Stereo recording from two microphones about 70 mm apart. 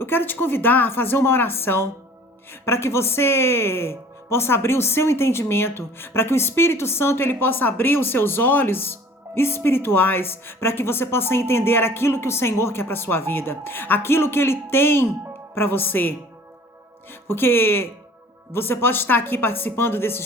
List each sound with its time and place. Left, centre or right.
0.0 s a woman's voice: left